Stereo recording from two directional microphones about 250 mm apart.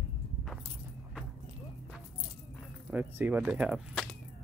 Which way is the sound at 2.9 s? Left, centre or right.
Centre.